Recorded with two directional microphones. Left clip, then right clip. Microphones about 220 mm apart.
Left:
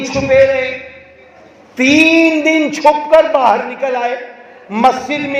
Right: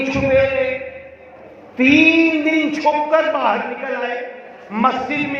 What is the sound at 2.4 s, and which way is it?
A man's voice, 60° left (ahead or behind).